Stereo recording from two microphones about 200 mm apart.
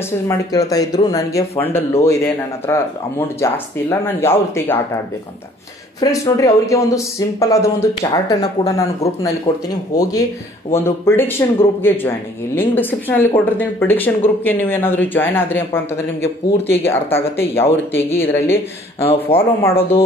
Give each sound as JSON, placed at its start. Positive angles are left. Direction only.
{"t": 0.3, "sound": "speech", "side_deg": 15}
{"t": 5.9, "sound": "speech", "side_deg": 15}
{"t": 19.0, "sound": "speech", "side_deg": 30}